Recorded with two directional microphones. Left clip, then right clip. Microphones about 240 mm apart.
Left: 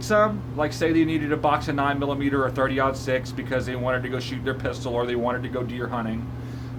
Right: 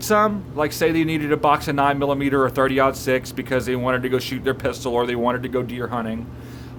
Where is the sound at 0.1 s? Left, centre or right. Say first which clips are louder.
Right 2 dB; right.